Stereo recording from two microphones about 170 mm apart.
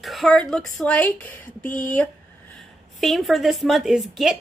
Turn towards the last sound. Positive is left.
turn(degrees=0)  # may be behind; listen again after turning